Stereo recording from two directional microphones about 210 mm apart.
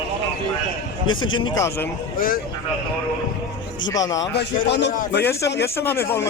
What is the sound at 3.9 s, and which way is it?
Speech, 15° left (ahead or behind).